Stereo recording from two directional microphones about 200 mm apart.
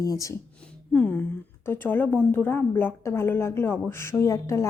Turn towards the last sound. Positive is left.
turn(degrees=15)  # may be behind; listen again after turning